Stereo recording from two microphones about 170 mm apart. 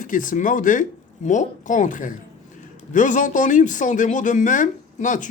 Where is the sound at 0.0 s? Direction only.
50° left (ahead or behind).